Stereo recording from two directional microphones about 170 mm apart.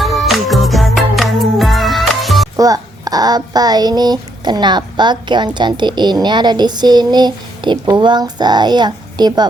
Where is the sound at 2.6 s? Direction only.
20° right (ahead or behind).